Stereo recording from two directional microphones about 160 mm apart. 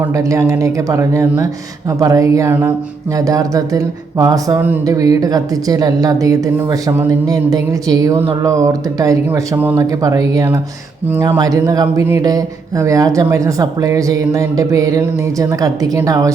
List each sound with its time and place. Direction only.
0.1 s a woman's voice: 20° right (ahead or behind)